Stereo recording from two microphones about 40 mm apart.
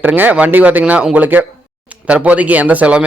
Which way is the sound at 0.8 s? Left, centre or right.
Right.